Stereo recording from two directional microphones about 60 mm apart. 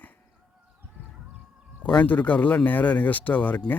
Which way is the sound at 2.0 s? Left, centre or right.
Left.